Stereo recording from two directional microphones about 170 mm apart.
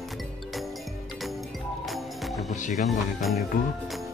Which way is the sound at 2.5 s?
45° left (ahead or behind).